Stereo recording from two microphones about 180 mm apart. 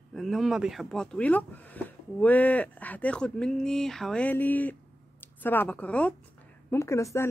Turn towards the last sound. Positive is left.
turn(degrees=15)  # may be behind; listen again after turning